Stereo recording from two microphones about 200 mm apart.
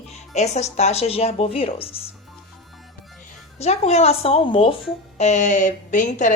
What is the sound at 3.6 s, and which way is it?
Speech, 35° left (ahead or behind).